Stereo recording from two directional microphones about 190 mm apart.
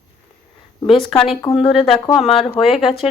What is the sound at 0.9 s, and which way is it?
Speech, centre (ahead or behind).